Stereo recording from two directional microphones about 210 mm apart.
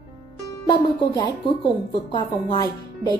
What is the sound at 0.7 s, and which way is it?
Speech, 20° left (ahead or behind).